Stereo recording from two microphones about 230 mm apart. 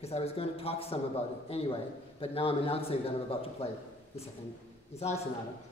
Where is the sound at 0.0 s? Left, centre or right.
Left.